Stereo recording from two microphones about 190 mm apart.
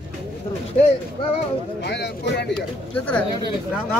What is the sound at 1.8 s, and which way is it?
Speech, 60° left (ahead or behind).